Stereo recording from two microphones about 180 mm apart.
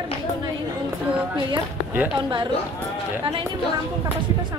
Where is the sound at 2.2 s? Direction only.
25° right (ahead or behind).